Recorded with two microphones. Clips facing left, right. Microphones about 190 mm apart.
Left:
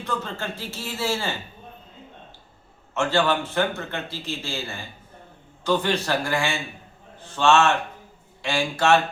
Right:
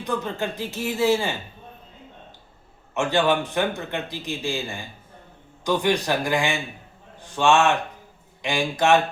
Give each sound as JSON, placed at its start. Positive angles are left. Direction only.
{"t": 0.0, "sound": "a man's voice", "side_deg": -15}
{"t": 2.9, "sound": "a man's voice", "side_deg": -15}